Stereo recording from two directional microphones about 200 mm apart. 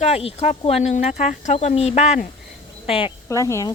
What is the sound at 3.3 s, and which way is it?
Speech, 15° left (ahead or behind).